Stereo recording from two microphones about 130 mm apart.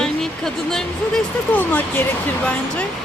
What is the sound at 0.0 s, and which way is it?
Speech, 5° left (ahead or behind).